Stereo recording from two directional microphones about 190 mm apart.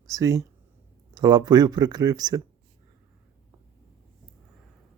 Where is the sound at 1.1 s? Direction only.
20° right (ahead or behind).